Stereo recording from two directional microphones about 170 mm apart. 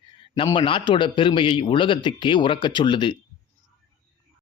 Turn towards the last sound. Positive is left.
turn(degrees=25)  # may be behind; listen again after turning